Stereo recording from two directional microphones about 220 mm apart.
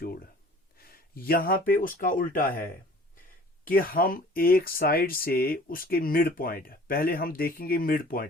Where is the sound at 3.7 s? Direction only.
40° left (ahead or behind).